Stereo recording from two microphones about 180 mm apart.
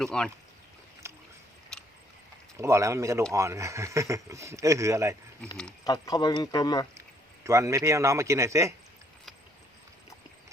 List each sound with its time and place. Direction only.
0.0 s speech: 5° left (ahead or behind)
1.0 s a sound: 15° right (ahead or behind)
2.6 s speech: 15° right (ahead or behind)
5.8 s speech: 20° left (ahead or behind)
7.4 s speech: 15° right (ahead or behind)